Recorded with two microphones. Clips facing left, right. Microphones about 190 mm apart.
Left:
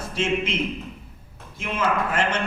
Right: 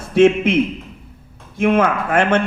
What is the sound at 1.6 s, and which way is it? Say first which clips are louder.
Speech: right 9 dB; 55° right (ahead or behind).